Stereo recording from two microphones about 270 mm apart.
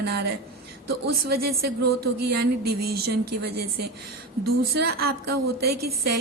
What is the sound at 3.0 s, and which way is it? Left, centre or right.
Speech, right.